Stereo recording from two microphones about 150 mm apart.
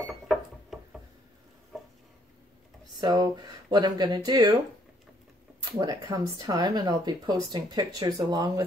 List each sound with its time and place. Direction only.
0.0 s a sound: centre (ahead or behind)
3.0 s speech: 25° right (ahead or behind)
5.7 s speech: 30° right (ahead or behind)